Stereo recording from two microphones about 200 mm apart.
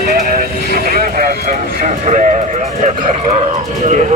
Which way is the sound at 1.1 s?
40° right (ahead or behind).